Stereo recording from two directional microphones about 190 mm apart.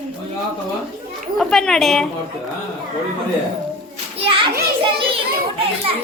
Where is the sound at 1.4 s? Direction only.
5° left (ahead or behind).